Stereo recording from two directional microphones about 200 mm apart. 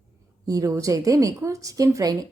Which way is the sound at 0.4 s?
15° right (ahead or behind).